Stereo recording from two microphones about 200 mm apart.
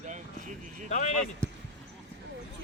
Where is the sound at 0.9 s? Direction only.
35° left (ahead or behind).